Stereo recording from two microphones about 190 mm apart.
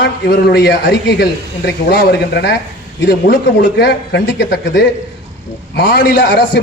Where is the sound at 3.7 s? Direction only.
60° left (ahead or behind).